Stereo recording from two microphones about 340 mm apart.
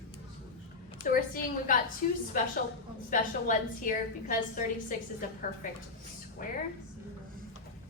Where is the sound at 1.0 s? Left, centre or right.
Left.